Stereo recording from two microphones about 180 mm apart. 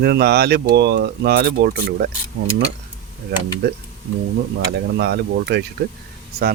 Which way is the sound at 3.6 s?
65° right (ahead or behind).